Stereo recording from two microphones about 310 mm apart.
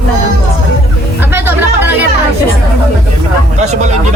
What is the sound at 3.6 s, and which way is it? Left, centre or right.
Speech, right.